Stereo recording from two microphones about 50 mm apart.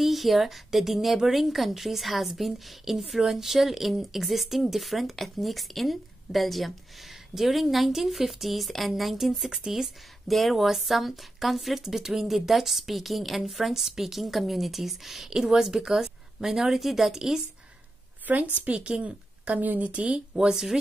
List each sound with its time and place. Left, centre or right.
0.0 s speech: centre
18.3 s a woman's voice: right
18.7 s speech: right
19.9 s speech: right